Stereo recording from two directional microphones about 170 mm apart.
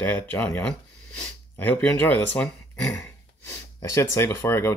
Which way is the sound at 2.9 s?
20° left (ahead or behind).